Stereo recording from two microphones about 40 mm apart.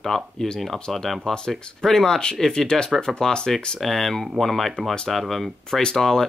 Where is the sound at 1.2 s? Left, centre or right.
Centre.